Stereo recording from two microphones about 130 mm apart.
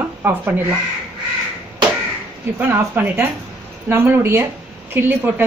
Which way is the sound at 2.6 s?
15° right (ahead or behind).